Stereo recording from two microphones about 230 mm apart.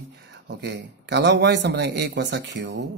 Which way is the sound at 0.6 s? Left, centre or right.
Right.